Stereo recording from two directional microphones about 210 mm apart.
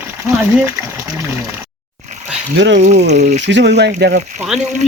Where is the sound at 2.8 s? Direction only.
35° right (ahead or behind).